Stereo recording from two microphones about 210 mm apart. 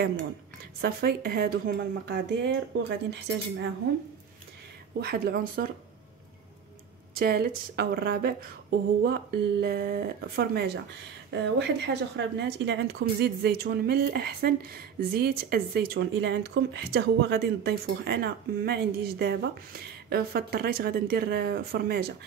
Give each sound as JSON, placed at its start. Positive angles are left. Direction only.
{"t": 0.7, "sound": "a woman's voice", "side_deg": -45}
{"t": 5.0, "sound": "a woman's voice", "side_deg": -45}
{"t": 7.2, "sound": "a woman's voice", "side_deg": -45}